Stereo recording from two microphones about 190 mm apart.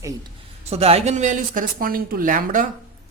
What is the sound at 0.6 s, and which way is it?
A woman's voice, 30° right (ahead or behind).